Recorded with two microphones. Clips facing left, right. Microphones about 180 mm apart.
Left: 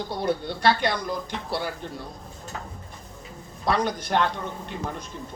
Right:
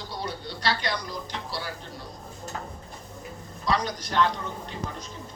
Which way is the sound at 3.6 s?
55° left (ahead or behind).